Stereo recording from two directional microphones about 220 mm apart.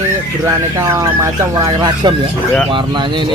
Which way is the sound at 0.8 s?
15° right (ahead or behind).